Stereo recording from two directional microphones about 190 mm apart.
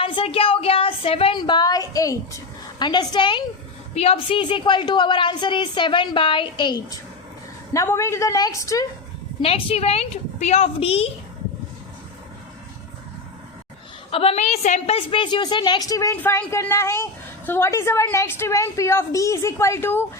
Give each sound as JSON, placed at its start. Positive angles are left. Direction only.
{"t": 0.0, "sound": "a woman's voice", "side_deg": 25}
{"t": 9.4, "sound": "a woman's voice", "side_deg": 30}
{"t": 14.1, "sound": "a woman's voice", "side_deg": 30}